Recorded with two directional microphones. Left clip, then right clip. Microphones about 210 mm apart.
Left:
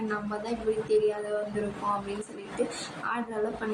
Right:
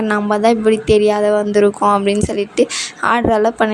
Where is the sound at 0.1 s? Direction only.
55° right (ahead or behind).